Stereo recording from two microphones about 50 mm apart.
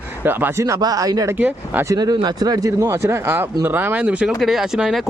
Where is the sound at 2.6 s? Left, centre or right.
Right.